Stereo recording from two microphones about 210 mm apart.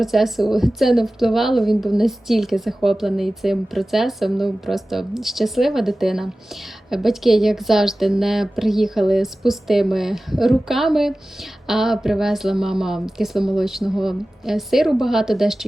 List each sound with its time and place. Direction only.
0.0 s a woman's voice: centre (ahead or behind)